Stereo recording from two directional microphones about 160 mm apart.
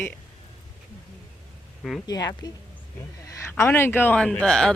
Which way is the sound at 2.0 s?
25° left (ahead or behind).